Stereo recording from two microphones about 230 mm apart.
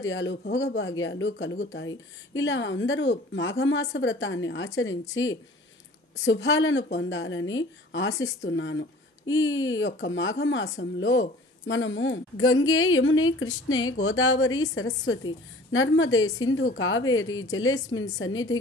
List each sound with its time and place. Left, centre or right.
0.1 s speech: left